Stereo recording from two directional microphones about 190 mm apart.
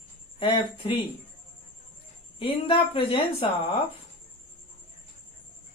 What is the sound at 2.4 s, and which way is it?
Speech, 30° left (ahead or behind).